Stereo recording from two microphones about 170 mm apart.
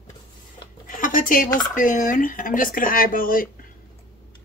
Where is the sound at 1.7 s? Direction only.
50° left (ahead or behind).